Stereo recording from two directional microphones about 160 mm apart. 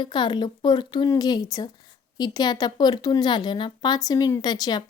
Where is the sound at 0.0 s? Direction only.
30° left (ahead or behind).